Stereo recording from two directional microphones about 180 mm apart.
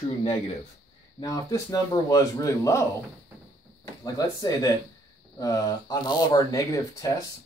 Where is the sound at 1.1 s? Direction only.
20° left (ahead or behind).